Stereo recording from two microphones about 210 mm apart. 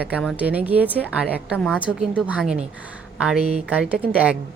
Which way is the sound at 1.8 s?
5° right (ahead or behind).